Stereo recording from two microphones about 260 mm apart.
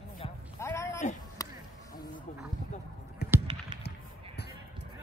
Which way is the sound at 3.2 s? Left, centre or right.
Left.